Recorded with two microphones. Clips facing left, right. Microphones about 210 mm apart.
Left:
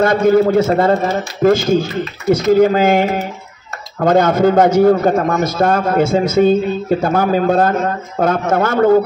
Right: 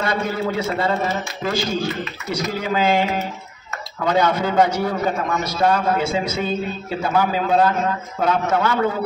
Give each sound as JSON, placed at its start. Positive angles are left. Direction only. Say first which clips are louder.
{"t": 0.0, "sound": "a man's voice", "louder": "left 11 dB", "side_deg": 50}